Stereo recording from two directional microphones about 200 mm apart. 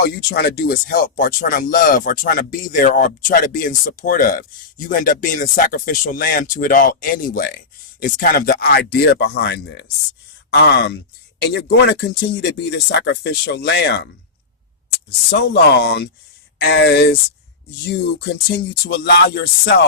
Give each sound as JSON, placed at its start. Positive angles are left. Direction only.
{"t": 0.0, "sound": "speech", "side_deg": 50}
{"t": 15.3, "sound": "speech", "side_deg": 55}